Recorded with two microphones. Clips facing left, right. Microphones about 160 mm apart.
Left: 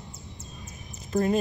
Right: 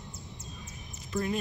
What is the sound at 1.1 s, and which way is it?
Speech, 40° left (ahead or behind).